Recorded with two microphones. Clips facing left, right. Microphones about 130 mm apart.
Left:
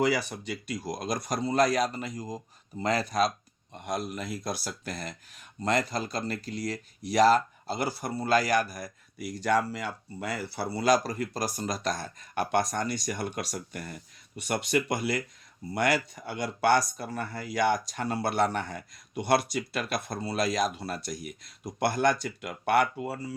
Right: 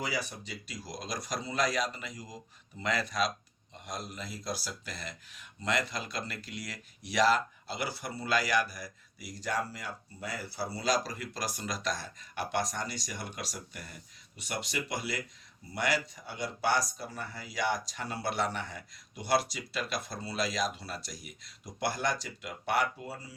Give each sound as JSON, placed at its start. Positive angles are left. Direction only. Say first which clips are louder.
{"t": 0.0, "sound": "speech", "louder": "left 9 dB", "side_deg": 65}